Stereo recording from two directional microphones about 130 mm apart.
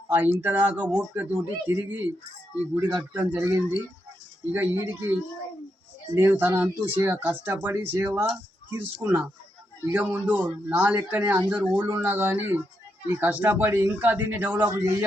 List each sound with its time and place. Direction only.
0.1 s a man's voice: 15° right (ahead or behind)
4.5 s a man's voice: 20° right (ahead or behind)
6.1 s a man's voice: 15° right (ahead or behind)